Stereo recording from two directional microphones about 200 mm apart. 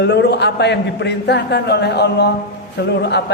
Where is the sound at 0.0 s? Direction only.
55° left (ahead or behind).